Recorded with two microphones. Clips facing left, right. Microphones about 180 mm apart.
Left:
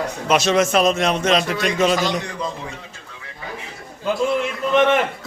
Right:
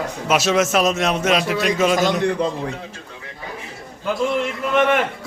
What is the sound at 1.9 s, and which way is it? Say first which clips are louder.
Speech: right 4 dB; 50° right (ahead or behind).